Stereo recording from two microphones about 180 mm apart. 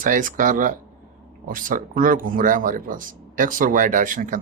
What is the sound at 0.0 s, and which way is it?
Speech, 50° right (ahead or behind).